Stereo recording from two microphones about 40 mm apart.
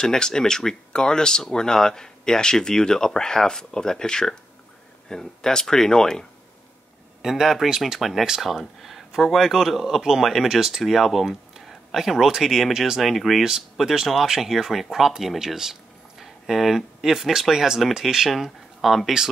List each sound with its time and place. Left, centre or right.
0.0 s speech: centre
7.2 s speech: centre
13.0 s speech: centre
13.4 s speech: centre